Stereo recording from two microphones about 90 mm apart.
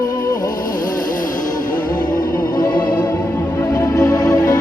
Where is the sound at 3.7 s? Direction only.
40° left (ahead or behind).